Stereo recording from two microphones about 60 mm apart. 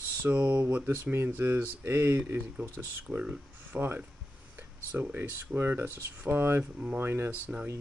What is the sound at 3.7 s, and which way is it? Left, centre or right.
Speech, right.